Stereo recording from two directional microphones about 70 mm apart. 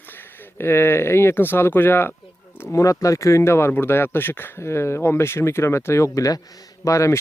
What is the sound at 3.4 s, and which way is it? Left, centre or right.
Speech, left.